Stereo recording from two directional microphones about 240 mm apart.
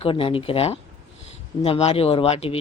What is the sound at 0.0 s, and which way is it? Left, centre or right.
Speech, left.